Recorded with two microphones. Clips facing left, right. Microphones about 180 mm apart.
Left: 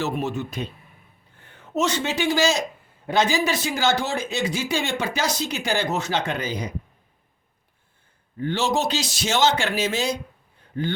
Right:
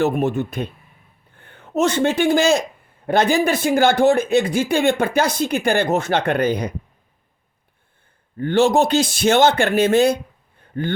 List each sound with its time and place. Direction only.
0.0 s speech: 55° right (ahead or behind)
8.4 s speech: 55° right (ahead or behind)
10.6 s a sound: 55° right (ahead or behind)